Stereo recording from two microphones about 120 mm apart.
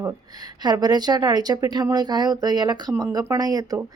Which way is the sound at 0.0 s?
30° right (ahead or behind).